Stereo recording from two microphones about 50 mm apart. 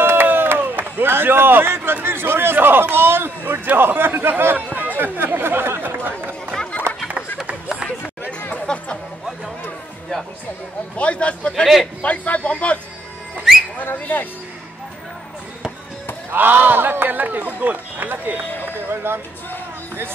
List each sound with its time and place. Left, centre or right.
0.0 s a sound: right
2.0 s a man's voice: right
4.6 s chatter: right
7.4 s run: right
8.3 s chatter: left
11.0 s a man's voice: left
11.6 s a man's voice: centre
12.0 s a man's voice: left
13.9 s speech: left
16.3 s speech: right
18.7 s a sound: right